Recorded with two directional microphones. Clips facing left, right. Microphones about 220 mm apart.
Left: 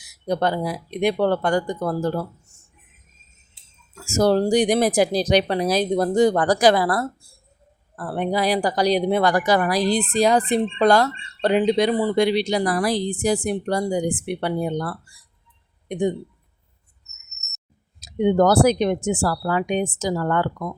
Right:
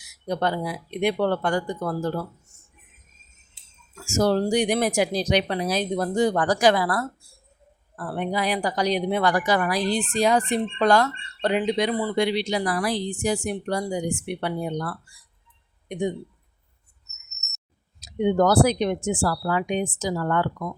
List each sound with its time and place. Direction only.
0.3 s speech: 35° left (ahead or behind)
4.0 s speech: 35° left (ahead or behind)
18.0 s speech: 40° left (ahead or behind)